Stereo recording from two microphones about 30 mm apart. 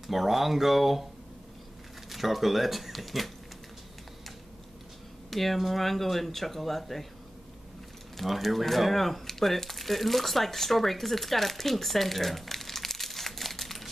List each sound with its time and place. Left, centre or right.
0.0 s speech: centre
2.0 s speech: centre
5.3 s speech: centre
8.2 s speech: centre